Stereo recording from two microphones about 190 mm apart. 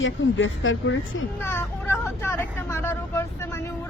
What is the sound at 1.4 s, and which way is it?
Speech, 10° left (ahead or behind).